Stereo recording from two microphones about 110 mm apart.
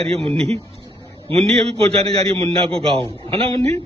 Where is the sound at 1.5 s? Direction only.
60° right (ahead or behind).